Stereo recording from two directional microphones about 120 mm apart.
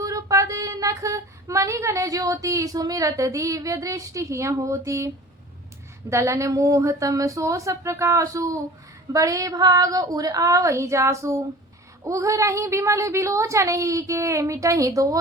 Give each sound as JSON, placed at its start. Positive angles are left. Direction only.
{"t": 0.0, "sound": "female singing", "side_deg": -25}
{"t": 6.1, "sound": "a woman's voice", "side_deg": -25}